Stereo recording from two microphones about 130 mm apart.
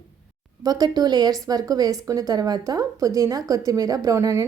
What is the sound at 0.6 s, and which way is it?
A woman's voice, 30° right (ahead or behind).